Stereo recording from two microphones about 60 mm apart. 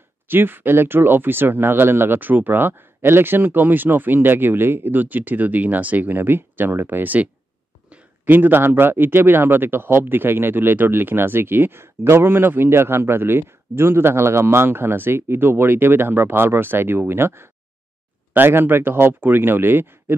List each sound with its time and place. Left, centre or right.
0.3 s a man's voice: right
8.3 s a man's voice: right